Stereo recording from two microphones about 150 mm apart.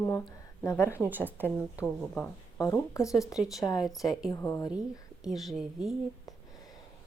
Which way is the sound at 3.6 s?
25° left (ahead or behind).